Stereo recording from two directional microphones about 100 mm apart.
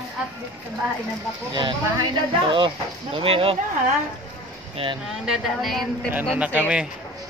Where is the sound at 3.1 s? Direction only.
65° right (ahead or behind).